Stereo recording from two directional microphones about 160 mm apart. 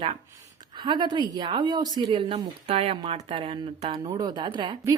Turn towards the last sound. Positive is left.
turn(degrees=-30)  # may be behind; listen again after turning